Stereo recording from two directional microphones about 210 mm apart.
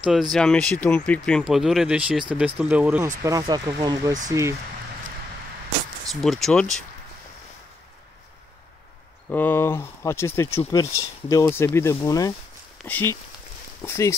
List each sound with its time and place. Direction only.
0.0 s speech: centre (ahead or behind)
3.3 s speech: 20° right (ahead or behind)
6.2 s speech: centre (ahead or behind)
9.3 s speech: 10° left (ahead or behind)